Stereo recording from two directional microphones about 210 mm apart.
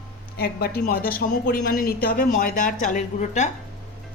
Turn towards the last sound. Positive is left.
turn(degrees=35)  # may be behind; listen again after turning